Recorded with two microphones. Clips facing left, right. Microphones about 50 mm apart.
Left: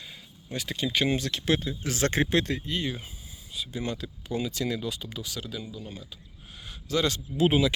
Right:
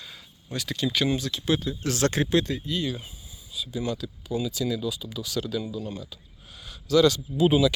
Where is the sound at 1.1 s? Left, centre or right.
Left.